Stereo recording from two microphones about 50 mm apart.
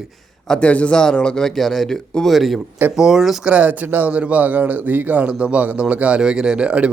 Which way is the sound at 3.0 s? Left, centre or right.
Centre.